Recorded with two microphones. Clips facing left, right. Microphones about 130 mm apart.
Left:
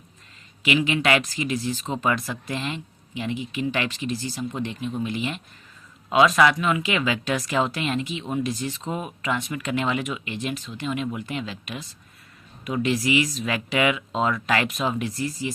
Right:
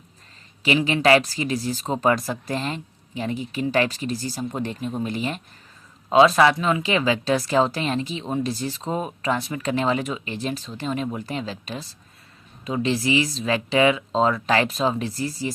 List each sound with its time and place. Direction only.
0.6 s speech: 35° right (ahead or behind)